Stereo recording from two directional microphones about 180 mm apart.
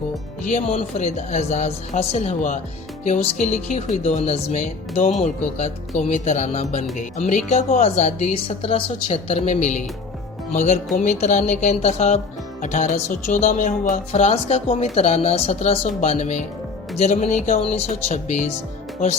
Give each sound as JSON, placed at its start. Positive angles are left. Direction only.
{"t": 0.4, "sound": "speech", "side_deg": 35}
{"t": 10.9, "sound": "speech", "side_deg": 45}